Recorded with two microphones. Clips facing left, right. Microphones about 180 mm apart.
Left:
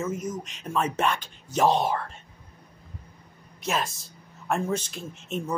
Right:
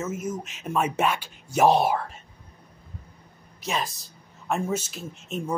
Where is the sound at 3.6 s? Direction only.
Centre (ahead or behind).